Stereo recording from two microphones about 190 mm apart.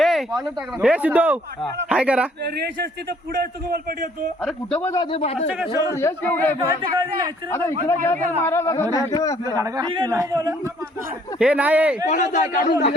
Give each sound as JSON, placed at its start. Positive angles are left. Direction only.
{"t": 0.0, "sound": "a sound", "side_deg": 0}
{"t": 0.8, "sound": "speech", "side_deg": -5}
{"t": 3.7, "sound": "a man's voice", "side_deg": -55}
{"t": 4.4, "sound": "speech", "side_deg": 10}
{"t": 5.1, "sound": "a man's voice", "side_deg": 30}
{"t": 5.7, "sound": "speech", "side_deg": 15}
{"t": 7.9, "sound": "speech", "side_deg": 10}
{"t": 9.6, "sound": "speech", "side_deg": -20}
{"t": 11.3, "sound": "speech", "side_deg": -5}
{"t": 12.0, "sound": "a man's voice", "side_deg": 40}